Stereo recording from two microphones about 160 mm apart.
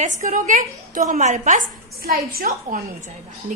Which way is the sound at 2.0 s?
65° right (ahead or behind).